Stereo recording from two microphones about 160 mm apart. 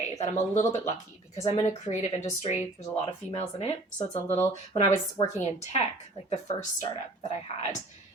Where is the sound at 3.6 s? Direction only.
40° left (ahead or behind).